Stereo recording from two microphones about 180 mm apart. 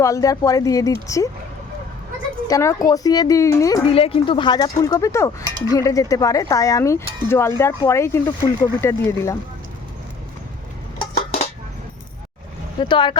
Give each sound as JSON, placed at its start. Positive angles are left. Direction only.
{"t": 0.0, "sound": "speech", "side_deg": 20}
{"t": 2.5, "sound": "speech", "side_deg": 15}
{"t": 3.8, "sound": "speech", "side_deg": 30}
{"t": 12.8, "sound": "speech", "side_deg": 25}